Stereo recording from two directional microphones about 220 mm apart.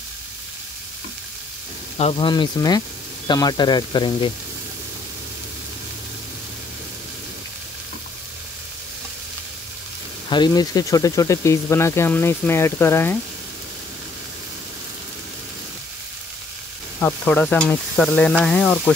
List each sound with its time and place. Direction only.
2.0 s speech: 25° left (ahead or behind)
10.3 s speech: 20° left (ahead or behind)
17.0 s stir: 5° left (ahead or behind)